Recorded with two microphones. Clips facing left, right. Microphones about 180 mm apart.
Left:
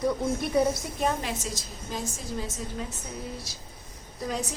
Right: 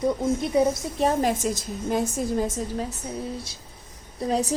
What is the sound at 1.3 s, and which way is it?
A woman's voice, 50° right (ahead or behind).